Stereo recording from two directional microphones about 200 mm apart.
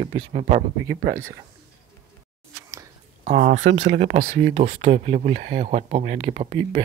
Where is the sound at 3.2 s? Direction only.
35° right (ahead or behind).